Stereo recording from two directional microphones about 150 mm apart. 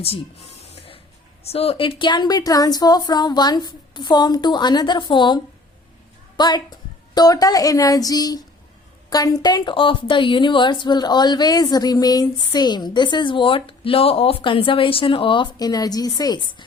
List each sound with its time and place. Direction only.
0.6 s printer: 45° left (ahead or behind)
1.5 s a woman's voice: 40° left (ahead or behind)